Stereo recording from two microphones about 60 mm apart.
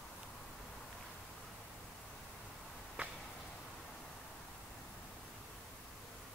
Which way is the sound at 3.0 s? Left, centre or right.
Right.